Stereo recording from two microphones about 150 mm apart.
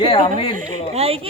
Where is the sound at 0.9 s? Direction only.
40° right (ahead or behind).